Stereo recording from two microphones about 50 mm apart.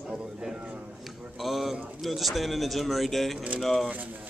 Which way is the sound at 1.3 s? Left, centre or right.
Centre.